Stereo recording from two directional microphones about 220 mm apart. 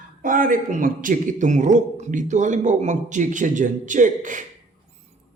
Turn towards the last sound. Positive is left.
turn(degrees=-35)  # may be behind; listen again after turning